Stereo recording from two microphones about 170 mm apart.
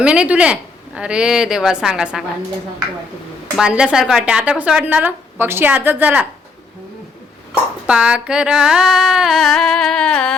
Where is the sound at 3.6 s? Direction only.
5° right (ahead or behind).